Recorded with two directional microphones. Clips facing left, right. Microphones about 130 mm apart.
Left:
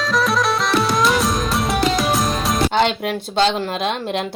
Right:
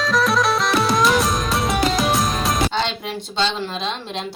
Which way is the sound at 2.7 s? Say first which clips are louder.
Left 6 dB; 60° left (ahead or behind).